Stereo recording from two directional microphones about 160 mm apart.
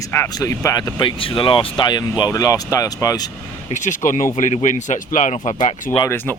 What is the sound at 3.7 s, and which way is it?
Speech, 50° left (ahead or behind).